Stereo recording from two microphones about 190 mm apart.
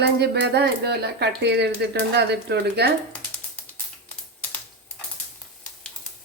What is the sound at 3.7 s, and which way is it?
Typing, 10° left (ahead or behind).